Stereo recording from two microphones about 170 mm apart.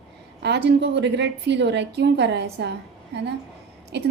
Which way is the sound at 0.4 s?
80° right.